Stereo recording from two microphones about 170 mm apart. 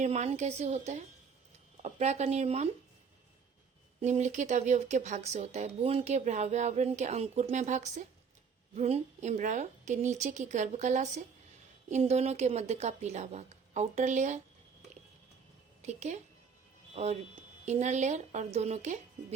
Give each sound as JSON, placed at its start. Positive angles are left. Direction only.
{"t": 0.0, "sound": "a woman's voice", "side_deg": -40}
{"t": 4.0, "sound": "a woman's voice", "side_deg": -45}
{"t": 15.8, "sound": "a woman's voice", "side_deg": -40}